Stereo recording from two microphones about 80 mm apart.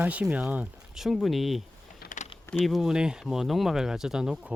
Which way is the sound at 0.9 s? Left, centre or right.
Centre.